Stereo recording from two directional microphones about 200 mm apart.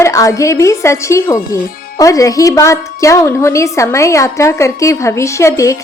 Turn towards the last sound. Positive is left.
turn(degrees=15)  # may be behind; listen again after turning